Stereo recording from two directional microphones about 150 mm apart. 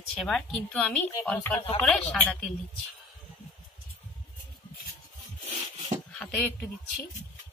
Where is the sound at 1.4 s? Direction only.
20° left (ahead or behind).